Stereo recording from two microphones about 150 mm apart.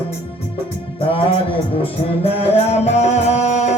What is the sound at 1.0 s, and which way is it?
Music, 40° left (ahead or behind).